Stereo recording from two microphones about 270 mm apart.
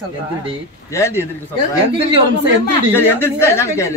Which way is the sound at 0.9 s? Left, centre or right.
Centre.